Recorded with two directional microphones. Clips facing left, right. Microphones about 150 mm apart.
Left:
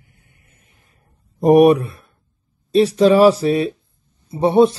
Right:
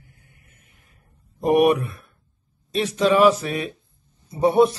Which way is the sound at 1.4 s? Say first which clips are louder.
Left 6 dB; 35° left (ahead or behind).